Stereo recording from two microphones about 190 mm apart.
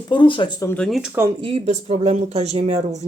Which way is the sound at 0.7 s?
5° left (ahead or behind).